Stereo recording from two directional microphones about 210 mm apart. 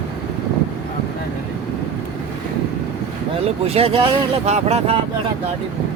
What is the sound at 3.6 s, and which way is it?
Speech, 30° right (ahead or behind).